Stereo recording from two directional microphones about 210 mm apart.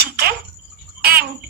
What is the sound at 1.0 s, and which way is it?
Bathtub, 50° right (ahead or behind).